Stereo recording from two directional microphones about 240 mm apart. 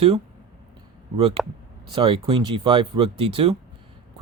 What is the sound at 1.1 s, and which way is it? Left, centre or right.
Speech, right.